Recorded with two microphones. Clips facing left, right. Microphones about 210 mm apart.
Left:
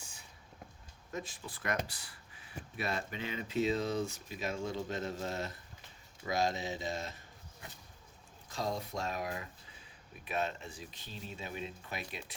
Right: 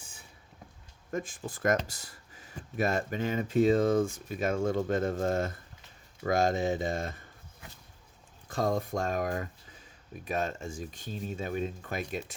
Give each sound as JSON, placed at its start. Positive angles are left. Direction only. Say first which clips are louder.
{"t": 1.1, "sound": "speech", "louder": "right 7 dB", "side_deg": -50}
{"t": 8.4, "sound": "speech", "louder": "right 8 dB", "side_deg": -50}